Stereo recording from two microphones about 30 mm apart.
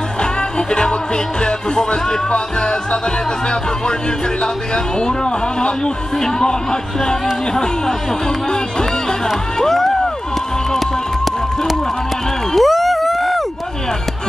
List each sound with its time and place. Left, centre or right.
0.2 s music: left
4.4 s speech: left
12.5 s a sound: centre